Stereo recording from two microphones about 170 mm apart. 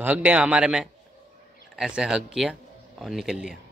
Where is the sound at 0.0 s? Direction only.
10° right (ahead or behind).